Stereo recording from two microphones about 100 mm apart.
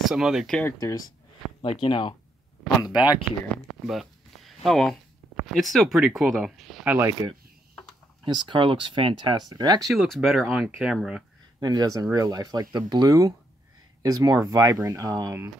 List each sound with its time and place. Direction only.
0.0 s speech: 5° right (ahead or behind)
0.7 s speech: 35° left (ahead or behind)
1.6 s speech: 60° left (ahead or behind)
2.9 s speech: 10° right (ahead or behind)
8.3 s speech: 55° right (ahead or behind)
9.5 s speech: 45° right (ahead or behind)
9.8 s speech: centre (ahead or behind)
11.6 s speech: 40° right (ahead or behind)